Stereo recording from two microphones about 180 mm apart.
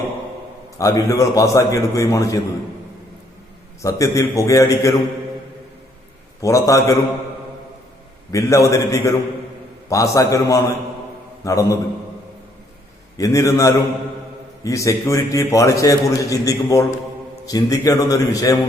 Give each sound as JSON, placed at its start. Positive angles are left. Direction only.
{"t": 0.8, "sound": "a man's voice", "side_deg": 15}
{"t": 3.8, "sound": "a man's voice", "side_deg": 15}
{"t": 6.4, "sound": "a man's voice", "side_deg": 15}
{"t": 8.3, "sound": "a man's voice", "side_deg": 15}
{"t": 13.1, "sound": "a man's voice", "side_deg": 20}